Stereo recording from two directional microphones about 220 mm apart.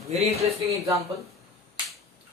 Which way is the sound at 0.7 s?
15° right (ahead or behind).